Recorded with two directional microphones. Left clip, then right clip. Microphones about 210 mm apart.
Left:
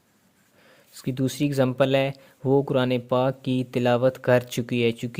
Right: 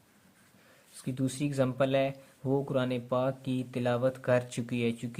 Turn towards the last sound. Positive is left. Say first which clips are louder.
# left 9 dB
turn(degrees=40)  # may be behind; listen again after turning